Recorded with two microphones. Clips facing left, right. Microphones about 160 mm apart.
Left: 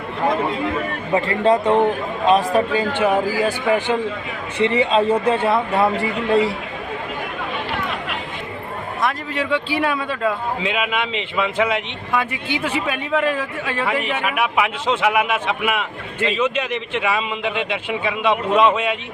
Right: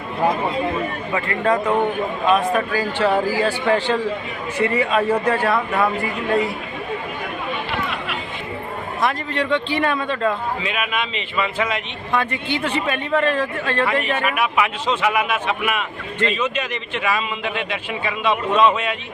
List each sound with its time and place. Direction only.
1.1 s speech: 30° left (ahead or behind)
3.0 s a man's voice: 15° left (ahead or behind)
9.0 s a man's voice: 5° left (ahead or behind)
10.7 s a man's voice: 20° left (ahead or behind)